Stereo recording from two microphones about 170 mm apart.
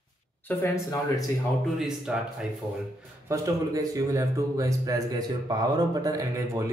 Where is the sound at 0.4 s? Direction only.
10° left (ahead or behind).